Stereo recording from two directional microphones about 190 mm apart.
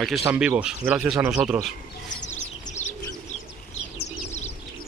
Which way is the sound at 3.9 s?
35° left (ahead or behind).